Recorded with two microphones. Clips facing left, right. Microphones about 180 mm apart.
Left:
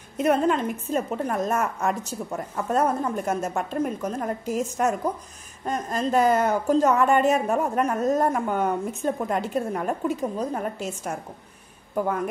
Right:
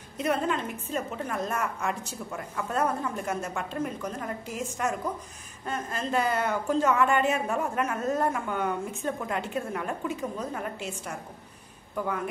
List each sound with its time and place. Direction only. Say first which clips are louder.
0.2 s a woman's voice: left 6 dB; 45° left (ahead or behind)